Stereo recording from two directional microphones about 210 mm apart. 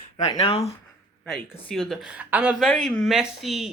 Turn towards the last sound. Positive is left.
turn(degrees=0)  # may be behind; listen again after turning